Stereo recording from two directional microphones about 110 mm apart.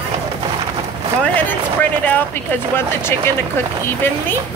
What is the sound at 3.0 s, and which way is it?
Speech, 20° left (ahead or behind).